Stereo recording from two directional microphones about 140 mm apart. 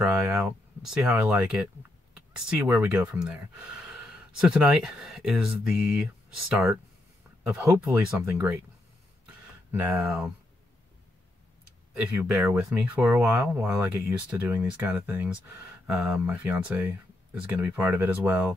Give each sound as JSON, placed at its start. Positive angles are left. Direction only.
{"t": 0.0, "sound": "speech", "side_deg": -5}
{"t": 7.8, "sound": "speech", "side_deg": -15}
{"t": 9.7, "sound": "speech", "side_deg": -10}
{"t": 11.9, "sound": "speech", "side_deg": -10}